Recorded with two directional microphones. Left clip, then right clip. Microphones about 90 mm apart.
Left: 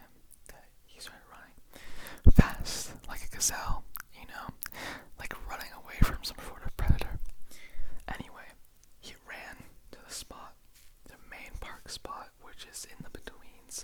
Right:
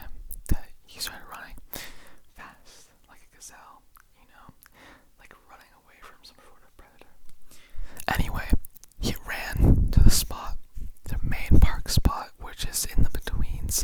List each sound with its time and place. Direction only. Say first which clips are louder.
0.0 s whispering: right 9 dB; 35° right (ahead or behind)
2.0 s whispering: left 16 dB; 40° left (ahead or behind)
7.5 s whispering: left 2 dB; centre (ahead or behind)
7.9 s whispering: right 14 dB; 40° right (ahead or behind)